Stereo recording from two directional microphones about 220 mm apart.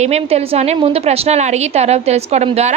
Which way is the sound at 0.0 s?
30° right (ahead or behind).